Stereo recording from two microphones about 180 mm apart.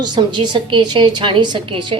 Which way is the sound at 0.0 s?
25° right (ahead or behind).